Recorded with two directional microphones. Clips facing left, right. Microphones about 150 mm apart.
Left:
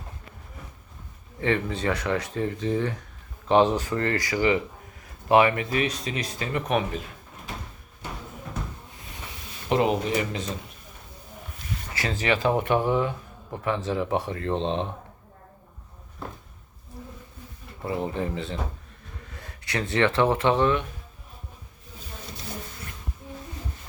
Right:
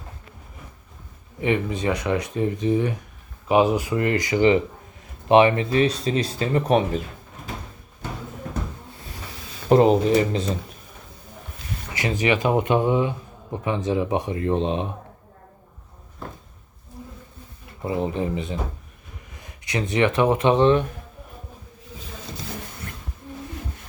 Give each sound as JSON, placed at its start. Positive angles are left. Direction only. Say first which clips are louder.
{"t": 1.4, "sound": "speech", "louder": "right 3 dB", "side_deg": -15}
{"t": 9.6, "sound": "speech", "louder": "right 7 dB", "side_deg": -35}
{"t": 11.9, "sound": "speech", "louder": "right 4 dB", "side_deg": -20}
{"t": 17.8, "sound": "speech", "louder": "right 4 dB", "side_deg": -20}